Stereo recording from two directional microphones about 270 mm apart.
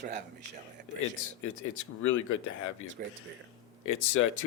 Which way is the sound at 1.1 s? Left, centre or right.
Left.